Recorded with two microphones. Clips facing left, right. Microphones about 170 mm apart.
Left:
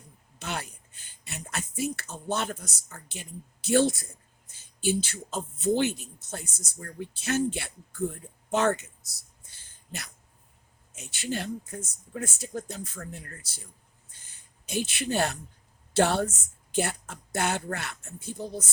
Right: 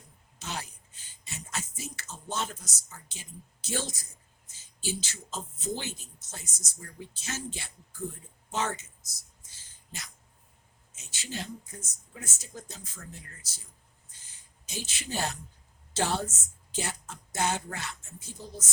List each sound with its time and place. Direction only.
0.3 s speech: 60° left (ahead or behind)
14.1 s a sound: 60° left (ahead or behind)
15.9 s a woman's voice: 60° left (ahead or behind)